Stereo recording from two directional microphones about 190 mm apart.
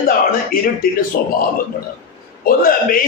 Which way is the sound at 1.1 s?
55° left (ahead or behind).